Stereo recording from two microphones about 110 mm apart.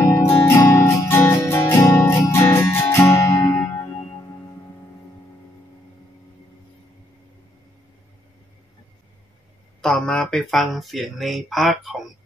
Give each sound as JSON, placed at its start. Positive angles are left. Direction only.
{"t": 0.1, "sound": "music", "side_deg": 25}
{"t": 3.4, "sound": "music", "side_deg": 10}
{"t": 9.8, "sound": "speech", "side_deg": 5}